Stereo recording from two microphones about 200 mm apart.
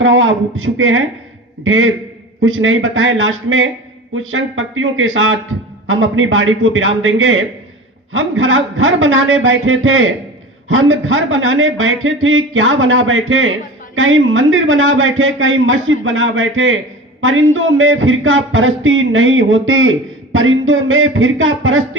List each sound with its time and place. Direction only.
0.0 s speech: 70° right (ahead or behind)